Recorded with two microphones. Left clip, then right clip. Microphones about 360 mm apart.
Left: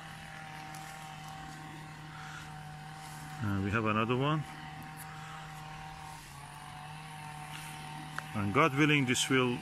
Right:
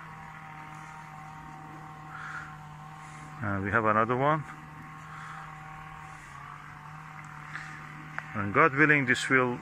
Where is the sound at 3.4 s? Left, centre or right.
Right.